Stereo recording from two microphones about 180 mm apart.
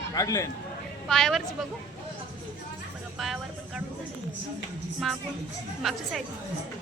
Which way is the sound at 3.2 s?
Centre (ahead or behind).